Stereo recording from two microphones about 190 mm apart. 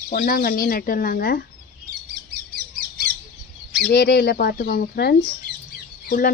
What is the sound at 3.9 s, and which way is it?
Speech, 60° left (ahead or behind).